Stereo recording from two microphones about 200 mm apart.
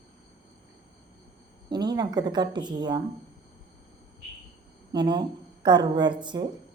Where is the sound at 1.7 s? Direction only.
20° right (ahead or behind).